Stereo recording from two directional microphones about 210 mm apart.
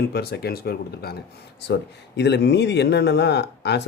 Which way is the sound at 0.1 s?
50° left (ahead or behind).